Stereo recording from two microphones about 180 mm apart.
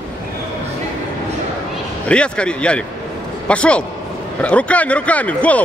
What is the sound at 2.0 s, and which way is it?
A man's voice, 5° left (ahead or behind).